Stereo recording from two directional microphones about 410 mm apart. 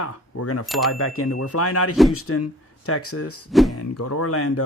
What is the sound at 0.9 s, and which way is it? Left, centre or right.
Speech, left.